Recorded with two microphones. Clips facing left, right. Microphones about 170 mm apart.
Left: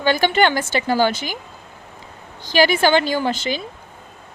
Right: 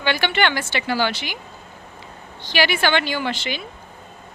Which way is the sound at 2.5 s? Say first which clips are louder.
Left 5 dB; 40° left (ahead or behind).